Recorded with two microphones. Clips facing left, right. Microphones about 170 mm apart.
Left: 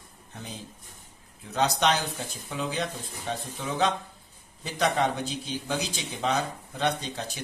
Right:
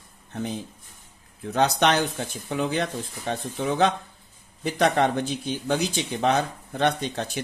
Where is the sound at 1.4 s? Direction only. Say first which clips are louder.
Right 4 dB; 60° right (ahead or behind).